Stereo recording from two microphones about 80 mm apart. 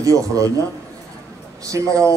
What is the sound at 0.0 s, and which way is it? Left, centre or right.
Speech, right.